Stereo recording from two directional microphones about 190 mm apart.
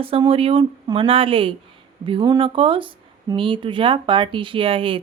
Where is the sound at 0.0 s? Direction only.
30° right (ahead or behind).